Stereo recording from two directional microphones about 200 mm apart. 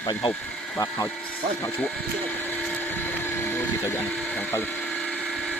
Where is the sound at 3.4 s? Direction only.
10° left (ahead or behind).